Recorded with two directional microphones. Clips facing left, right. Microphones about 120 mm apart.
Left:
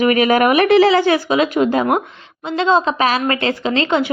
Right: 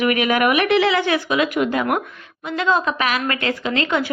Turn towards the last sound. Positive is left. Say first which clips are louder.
# left 4 dB
turn(degrees=25)  # may be behind; listen again after turning